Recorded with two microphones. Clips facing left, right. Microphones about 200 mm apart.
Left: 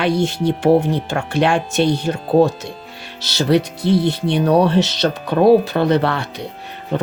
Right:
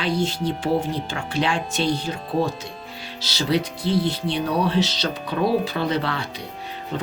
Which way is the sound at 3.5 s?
60° left (ahead or behind).